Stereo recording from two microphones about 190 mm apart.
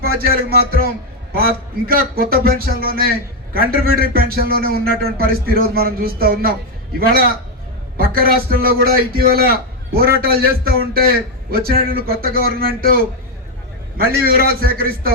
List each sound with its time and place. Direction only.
0.0 s a man's voice: 50° right (ahead or behind)
7.9 s a man's voice: 50° right (ahead or behind)